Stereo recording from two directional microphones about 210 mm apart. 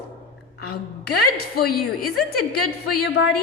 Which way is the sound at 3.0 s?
55° left (ahead or behind).